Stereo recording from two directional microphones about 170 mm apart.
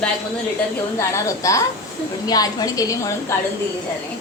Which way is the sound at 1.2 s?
20° left (ahead or behind).